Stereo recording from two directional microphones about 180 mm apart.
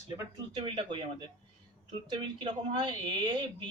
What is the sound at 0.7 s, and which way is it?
Speech, 30° right (ahead or behind).